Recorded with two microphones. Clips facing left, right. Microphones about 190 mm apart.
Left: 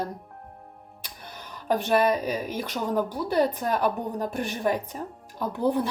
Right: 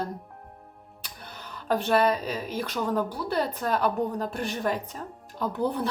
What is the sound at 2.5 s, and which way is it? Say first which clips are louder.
Speech: right 2 dB; 10° left (ahead or behind).